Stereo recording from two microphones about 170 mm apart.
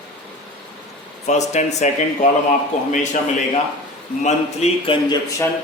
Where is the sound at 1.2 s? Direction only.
45° left (ahead or behind).